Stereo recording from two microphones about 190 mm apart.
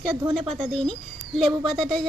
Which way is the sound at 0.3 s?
Centre (ahead or behind).